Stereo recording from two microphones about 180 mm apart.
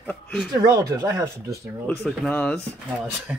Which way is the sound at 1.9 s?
5° left (ahead or behind).